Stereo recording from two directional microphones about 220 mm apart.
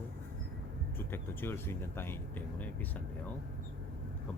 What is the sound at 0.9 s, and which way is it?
Speech, 10° left (ahead or behind).